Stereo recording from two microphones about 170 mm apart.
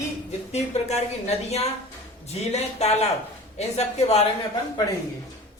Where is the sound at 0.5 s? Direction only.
40° left (ahead or behind).